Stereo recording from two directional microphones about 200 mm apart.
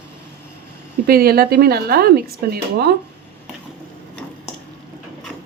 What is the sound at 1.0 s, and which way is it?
Speech, 50° right (ahead or behind).